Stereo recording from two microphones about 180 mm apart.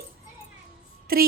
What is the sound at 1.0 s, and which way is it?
Music, 55° right (ahead or behind).